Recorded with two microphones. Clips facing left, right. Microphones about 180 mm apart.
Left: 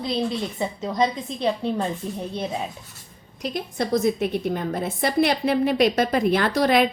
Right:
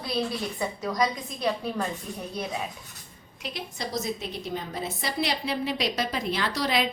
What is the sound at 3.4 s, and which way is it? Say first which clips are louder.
A woman's voice: left 8 dB; 50° left (ahead or behind).